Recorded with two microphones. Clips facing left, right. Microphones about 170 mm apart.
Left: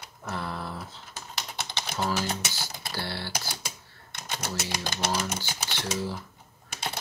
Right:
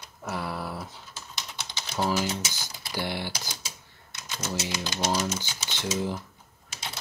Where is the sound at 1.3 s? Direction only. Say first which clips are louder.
Left 4 dB; 60° left (ahead or behind).